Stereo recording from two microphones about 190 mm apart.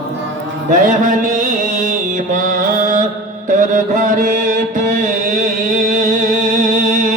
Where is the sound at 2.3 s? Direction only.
45° right (ahead or behind).